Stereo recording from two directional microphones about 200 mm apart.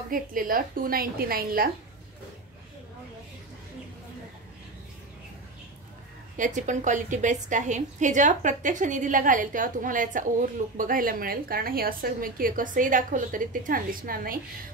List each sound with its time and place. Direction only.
0.1 s a woman's voice: 45° right (ahead or behind)
6.3 s a woman's voice: 40° right (ahead or behind)